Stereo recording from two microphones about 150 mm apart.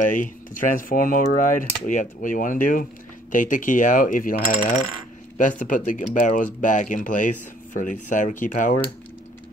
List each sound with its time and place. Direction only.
0.0 s speech: 60° left (ahead or behind)